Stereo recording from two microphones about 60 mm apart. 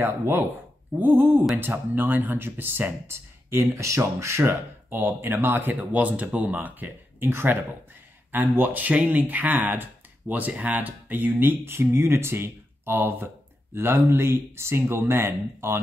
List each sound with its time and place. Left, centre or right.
0.0 s speech: right